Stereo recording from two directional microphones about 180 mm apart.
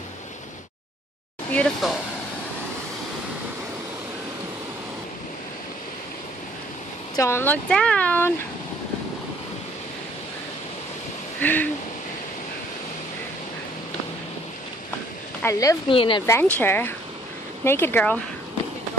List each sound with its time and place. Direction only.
1.5 s speech: 5° left (ahead or behind)
7.2 s speech: 15° left (ahead or behind)
11.4 s speech: 10° left (ahead or behind)
15.4 s speech: 15° left (ahead or behind)
15.9 s speech: 30° left (ahead or behind)
16.3 s speech: 10° left (ahead or behind)